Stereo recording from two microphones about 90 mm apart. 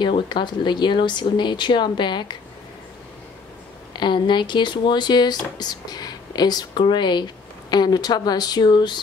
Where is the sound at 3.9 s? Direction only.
60° left (ahead or behind).